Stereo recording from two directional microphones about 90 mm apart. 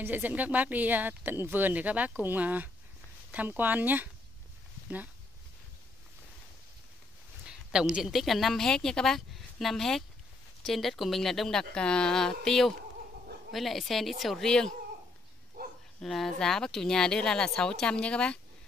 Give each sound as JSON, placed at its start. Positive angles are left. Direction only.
{"t": 0.0, "sound": "speech", "side_deg": -20}
{"t": 7.4, "sound": "a woman's voice", "side_deg": -10}
{"t": 16.0, "sound": "speech", "side_deg": 5}